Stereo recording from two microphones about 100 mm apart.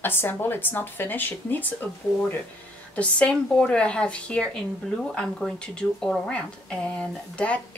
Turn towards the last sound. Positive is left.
turn(degrees=10)  # may be behind; listen again after turning